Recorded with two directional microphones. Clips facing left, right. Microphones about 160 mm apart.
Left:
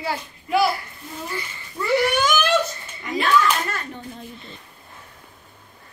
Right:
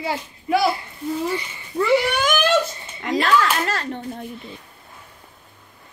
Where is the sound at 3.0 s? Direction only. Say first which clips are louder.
Right 1 dB; 85° right.